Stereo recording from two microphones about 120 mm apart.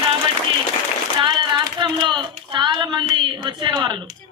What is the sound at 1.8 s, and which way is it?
Speech, 40° right (ahead or behind).